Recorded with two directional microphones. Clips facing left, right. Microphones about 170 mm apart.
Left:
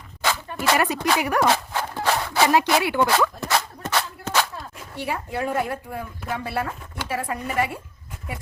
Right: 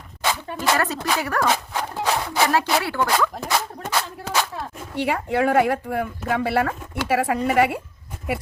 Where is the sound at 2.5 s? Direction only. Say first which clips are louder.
Left 2 dB; 15° left (ahead or behind).